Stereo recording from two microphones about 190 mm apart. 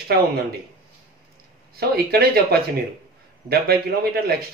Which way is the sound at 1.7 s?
55° right (ahead or behind).